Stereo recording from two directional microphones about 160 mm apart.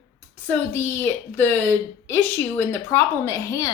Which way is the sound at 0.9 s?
15° left (ahead or behind).